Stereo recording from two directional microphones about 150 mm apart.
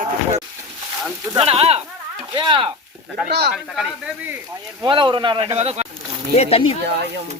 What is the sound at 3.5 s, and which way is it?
Speech, centre (ahead or behind).